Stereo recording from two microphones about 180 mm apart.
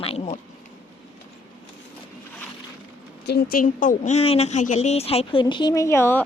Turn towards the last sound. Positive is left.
turn(degrees=10)  # may be behind; listen again after turning